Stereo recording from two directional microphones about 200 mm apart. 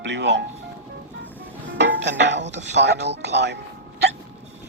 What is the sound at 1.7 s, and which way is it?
Speech, 60° right (ahead or behind).